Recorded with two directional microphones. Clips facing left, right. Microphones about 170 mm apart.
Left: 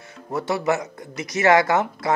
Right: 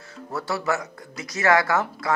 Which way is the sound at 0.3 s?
20° left (ahead or behind).